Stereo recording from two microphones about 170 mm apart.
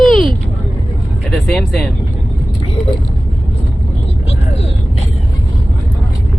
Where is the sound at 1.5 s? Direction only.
Centre (ahead or behind).